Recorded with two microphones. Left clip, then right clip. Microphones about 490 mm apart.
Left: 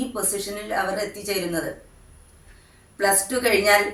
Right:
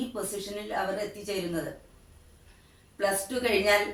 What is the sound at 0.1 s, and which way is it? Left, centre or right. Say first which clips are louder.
Speech: left 6 dB; right.